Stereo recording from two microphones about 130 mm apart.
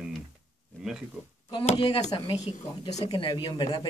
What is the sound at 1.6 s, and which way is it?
Speech, 55° left (ahead or behind).